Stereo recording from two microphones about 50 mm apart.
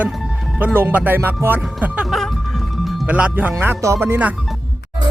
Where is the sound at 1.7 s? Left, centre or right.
Right.